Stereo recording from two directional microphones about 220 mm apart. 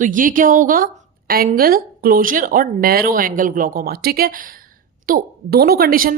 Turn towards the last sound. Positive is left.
turn(degrees=-40)  # may be behind; listen again after turning